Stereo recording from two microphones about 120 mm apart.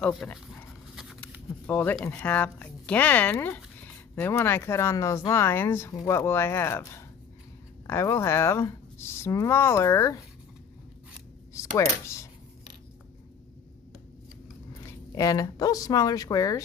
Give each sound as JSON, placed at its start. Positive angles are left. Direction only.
{"t": 0.2, "sound": "speech", "side_deg": 10}
{"t": 1.7, "sound": "speech", "side_deg": 15}
{"t": 11.7, "sound": "speech", "side_deg": 25}
{"t": 14.9, "sound": "speech", "side_deg": 25}